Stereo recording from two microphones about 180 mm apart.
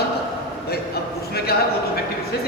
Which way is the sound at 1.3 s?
60° left (ahead or behind).